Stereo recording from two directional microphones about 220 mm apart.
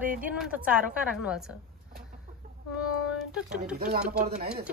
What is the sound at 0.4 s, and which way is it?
Speech, 5° right (ahead or behind).